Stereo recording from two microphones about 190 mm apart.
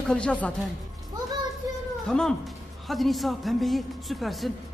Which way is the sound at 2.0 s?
5° left (ahead or behind).